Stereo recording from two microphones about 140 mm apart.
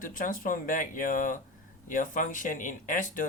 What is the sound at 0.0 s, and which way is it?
Speech, 75° left (ahead or behind).